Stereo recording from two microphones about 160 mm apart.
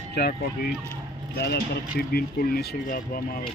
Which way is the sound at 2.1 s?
70° left (ahead or behind).